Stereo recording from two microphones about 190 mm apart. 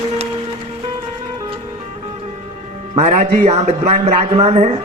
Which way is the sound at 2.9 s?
35° right (ahead or behind).